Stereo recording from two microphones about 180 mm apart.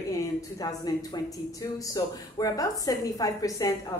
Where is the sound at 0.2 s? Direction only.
20° left (ahead or behind).